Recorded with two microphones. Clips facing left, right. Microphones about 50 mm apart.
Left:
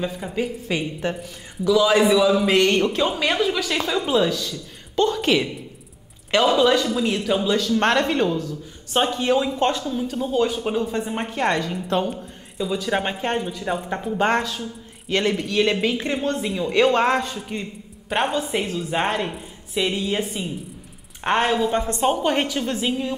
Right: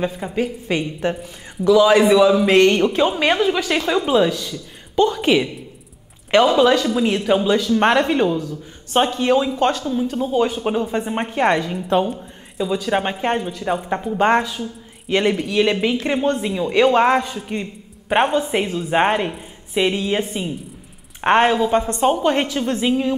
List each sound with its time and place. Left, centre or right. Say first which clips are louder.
0.0 s speech: right 3 dB; centre
1.0 s a woman's voice: right 4 dB; right
7.1 s speech: right 6 dB; right; by 9.6 s centre
9.6 s speech: right 3 dB; centre
9.9 s a woman's voice: right 3 dB; centre
16.1 s a woman's voice: right 5 dB; right
16.3 s a woman's voice: right 2 dB; centre
21.5 s speech: right 4 dB; centre
22.0 s a woman's voice: right 1 dB; centre